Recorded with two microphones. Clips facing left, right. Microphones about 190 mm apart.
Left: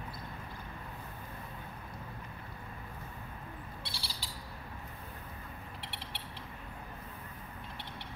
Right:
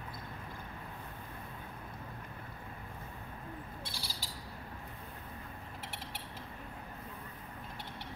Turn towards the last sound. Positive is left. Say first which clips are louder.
# right 1 dB
turn(degrees=-45)  # may be behind; listen again after turning